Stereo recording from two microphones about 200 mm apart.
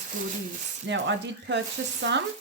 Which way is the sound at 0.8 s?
65° right (ahead or behind).